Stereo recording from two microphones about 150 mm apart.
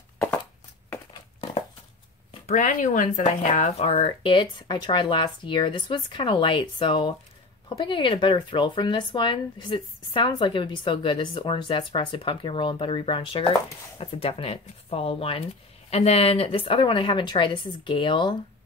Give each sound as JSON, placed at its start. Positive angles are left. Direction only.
{"t": 2.4, "sound": "speech", "side_deg": 60}